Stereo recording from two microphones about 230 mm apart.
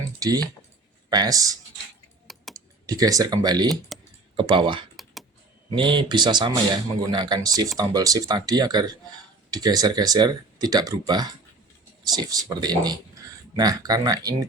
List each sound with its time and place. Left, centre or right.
0.2 s speech: centre
2.2 s typing: centre
2.8 s a man's voice: centre